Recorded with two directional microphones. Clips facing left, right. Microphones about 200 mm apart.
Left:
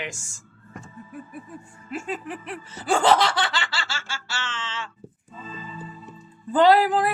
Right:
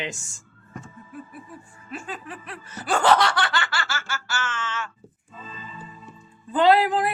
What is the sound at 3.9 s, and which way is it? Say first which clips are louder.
Laughter: right 3 dB; 30° left (ahead or behind).